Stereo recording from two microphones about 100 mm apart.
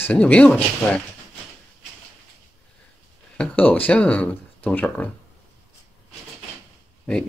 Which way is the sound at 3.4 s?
15° left (ahead or behind).